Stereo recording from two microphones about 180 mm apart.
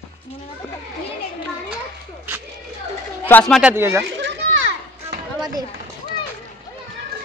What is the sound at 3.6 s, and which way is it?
Speech, 10° right (ahead or behind).